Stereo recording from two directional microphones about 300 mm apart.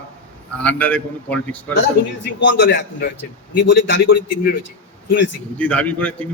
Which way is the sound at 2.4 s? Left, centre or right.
Left.